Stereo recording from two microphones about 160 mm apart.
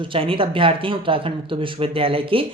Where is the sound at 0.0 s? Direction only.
35° right (ahead or behind).